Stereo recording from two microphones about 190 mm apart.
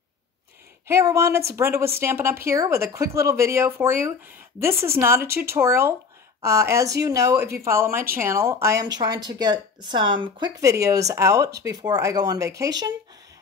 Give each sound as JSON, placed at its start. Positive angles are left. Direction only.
{"t": 0.8, "sound": "speech", "side_deg": -15}